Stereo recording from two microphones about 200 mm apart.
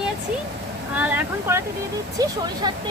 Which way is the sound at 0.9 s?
10° right (ahead or behind).